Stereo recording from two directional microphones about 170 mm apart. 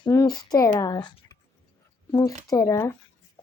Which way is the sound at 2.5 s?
20° left (ahead or behind).